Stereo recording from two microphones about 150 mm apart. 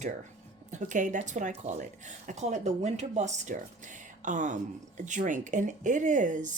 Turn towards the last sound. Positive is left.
turn(degrees=-55)  # may be behind; listen again after turning